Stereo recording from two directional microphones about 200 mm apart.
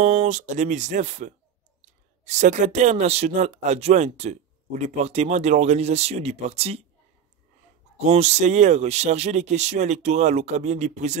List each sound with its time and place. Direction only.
0.0 s speech: 35° right (ahead or behind)
8.0 s speech: 35° right (ahead or behind)